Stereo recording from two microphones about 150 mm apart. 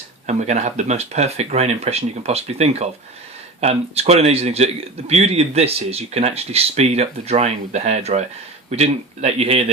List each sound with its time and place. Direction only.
0.3 s speech: 50° right (ahead or behind)